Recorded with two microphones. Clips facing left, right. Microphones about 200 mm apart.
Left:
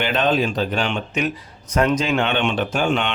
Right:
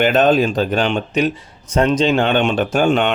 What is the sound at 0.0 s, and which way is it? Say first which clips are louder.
Speech: right 6 dB; 45° right (ahead or behind).